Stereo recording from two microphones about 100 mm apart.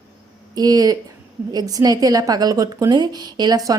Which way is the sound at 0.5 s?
40° right (ahead or behind).